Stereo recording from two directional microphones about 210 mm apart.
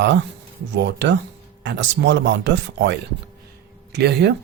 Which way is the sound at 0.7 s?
55° right (ahead or behind).